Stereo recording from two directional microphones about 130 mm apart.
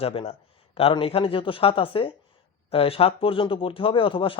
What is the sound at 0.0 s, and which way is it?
Speech, 45° left (ahead or behind).